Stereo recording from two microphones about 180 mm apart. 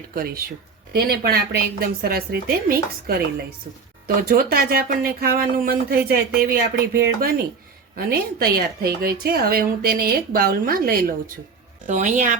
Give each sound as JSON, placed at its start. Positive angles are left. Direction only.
{"t": 0.1, "sound": "a woman's voice", "side_deg": -55}
{"t": 11.9, "sound": "a woman's voice", "side_deg": -45}